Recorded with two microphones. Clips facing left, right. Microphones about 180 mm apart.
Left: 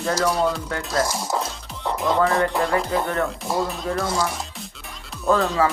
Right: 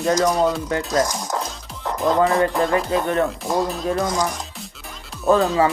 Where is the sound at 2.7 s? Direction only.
20° right (ahead or behind).